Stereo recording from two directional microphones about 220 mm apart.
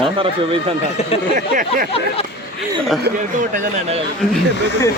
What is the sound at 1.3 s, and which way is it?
Speech, 40° right (ahead or behind).